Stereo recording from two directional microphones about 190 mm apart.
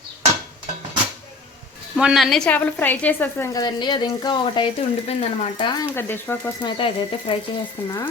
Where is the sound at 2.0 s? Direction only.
Centre (ahead or behind); by 5.9 s 25° left (ahead or behind).